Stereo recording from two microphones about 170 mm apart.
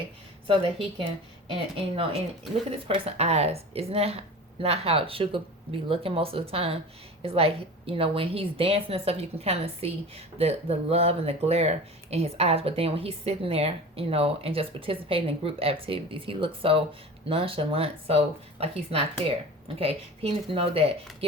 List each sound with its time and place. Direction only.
0.4 s a woman's voice: 30° right (ahead or behind)